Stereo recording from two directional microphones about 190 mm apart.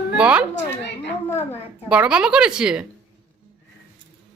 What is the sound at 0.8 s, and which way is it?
Speech, 65° left (ahead or behind).